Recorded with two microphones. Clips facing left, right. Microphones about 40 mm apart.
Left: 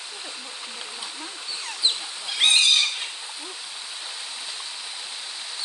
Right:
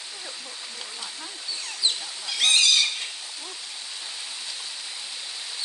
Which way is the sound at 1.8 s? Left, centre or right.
Left.